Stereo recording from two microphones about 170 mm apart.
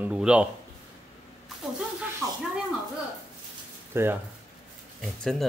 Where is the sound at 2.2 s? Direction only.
Centre (ahead or behind).